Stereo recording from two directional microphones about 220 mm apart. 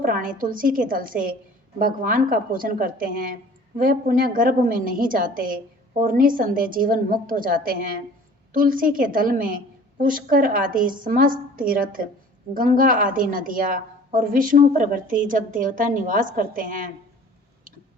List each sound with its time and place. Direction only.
0.0 s a woman's voice: 40° right (ahead or behind)